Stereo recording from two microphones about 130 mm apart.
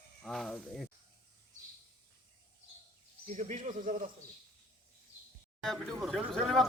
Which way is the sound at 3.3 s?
65° right (ahead or behind).